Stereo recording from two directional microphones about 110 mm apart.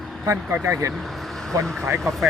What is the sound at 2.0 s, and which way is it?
Speech, centre (ahead or behind).